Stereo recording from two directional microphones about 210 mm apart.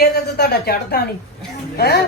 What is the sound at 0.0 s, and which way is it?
A woman's voice, 50° left (ahead or behind).